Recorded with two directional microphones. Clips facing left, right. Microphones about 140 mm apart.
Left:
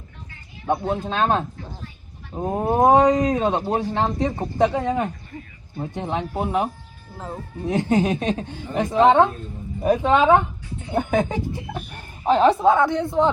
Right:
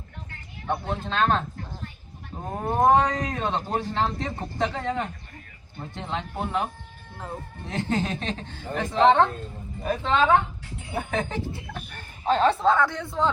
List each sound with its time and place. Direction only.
0.7 s a man's voice: 15° left (ahead or behind)
7.7 s a man's voice: 15° left (ahead or behind)